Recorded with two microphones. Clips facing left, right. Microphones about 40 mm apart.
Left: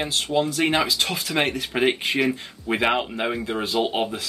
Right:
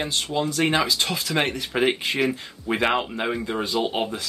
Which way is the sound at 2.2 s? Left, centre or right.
Centre.